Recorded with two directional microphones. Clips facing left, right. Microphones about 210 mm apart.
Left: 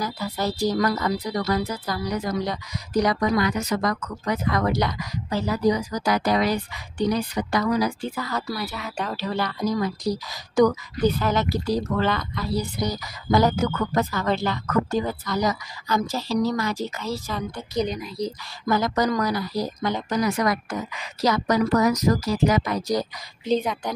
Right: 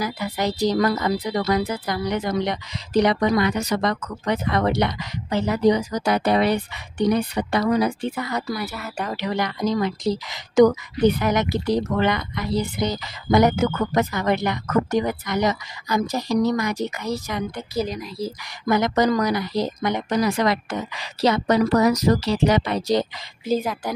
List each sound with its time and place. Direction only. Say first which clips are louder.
0.0 s speech: right 2 dB; 20° right (ahead or behind)
6.5 s a woman's voice: right 3 dB; 60° right (ahead or behind)
7.3 s speech: right 2 dB; 30° right (ahead or behind)
8.2 s a woman's voice: right 2 dB; 15° right (ahead or behind)
8.6 s speech: right 1 dB; 5° right (ahead or behind)
9.1 s a woman's voice: right 3 dB; 15° right (ahead or behind)
17.7 s speech: left 1 dB; centre (ahead or behind)
18.7 s speech: right 3 dB; 20° right (ahead or behind)
20.2 s speech: right 2 dB; 30° right (ahead or behind)
22.2 s speech: right 1 dB; 75° right (ahead or behind)
22.7 s speech: right 3 dB; 25° right (ahead or behind)
23.4 s speech: even; 5° right (ahead or behind)